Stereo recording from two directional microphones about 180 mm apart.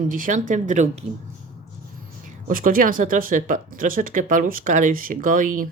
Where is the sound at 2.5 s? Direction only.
50° right (ahead or behind).